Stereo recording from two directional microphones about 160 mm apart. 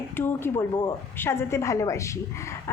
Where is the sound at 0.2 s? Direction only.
15° left (ahead or behind).